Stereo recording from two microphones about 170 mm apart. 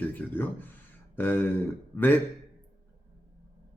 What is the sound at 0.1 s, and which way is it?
Speech, 10° left (ahead or behind).